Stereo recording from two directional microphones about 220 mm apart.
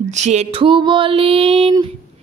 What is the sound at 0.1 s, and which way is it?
Female singing, 30° right (ahead or behind).